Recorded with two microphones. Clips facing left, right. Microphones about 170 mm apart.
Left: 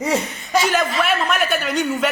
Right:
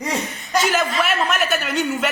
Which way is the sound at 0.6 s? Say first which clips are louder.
Right 1 dB; 5° right (ahead or behind).